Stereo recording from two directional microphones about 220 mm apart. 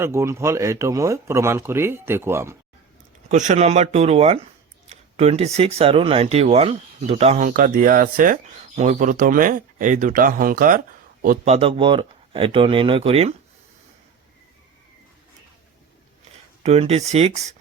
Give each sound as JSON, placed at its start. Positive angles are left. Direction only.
{"t": 0.0, "sound": "speech", "side_deg": -10}
{"t": 3.2, "sound": "speech", "side_deg": -35}
{"t": 16.6, "sound": "speech", "side_deg": -30}